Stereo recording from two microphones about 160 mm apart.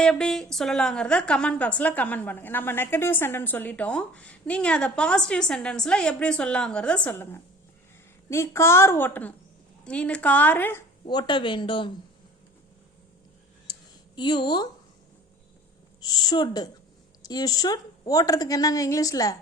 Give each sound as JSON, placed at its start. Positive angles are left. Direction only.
{"t": 0.0, "sound": "a woman's voice", "side_deg": 5}
{"t": 11.0, "sound": "speech", "side_deg": 30}
{"t": 14.2, "sound": "a woman's voice", "side_deg": 30}
{"t": 16.0, "sound": "a woman's voice", "side_deg": 25}